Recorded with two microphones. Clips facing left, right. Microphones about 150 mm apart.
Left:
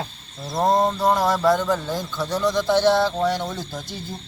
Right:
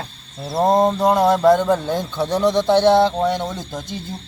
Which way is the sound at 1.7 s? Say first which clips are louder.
Right 5 dB; 60° right (ahead or behind).